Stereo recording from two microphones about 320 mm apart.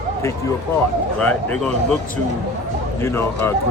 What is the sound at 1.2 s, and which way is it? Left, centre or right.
Speech, centre.